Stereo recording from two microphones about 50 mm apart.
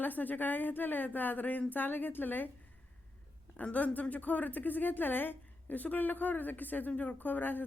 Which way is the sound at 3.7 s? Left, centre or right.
Left.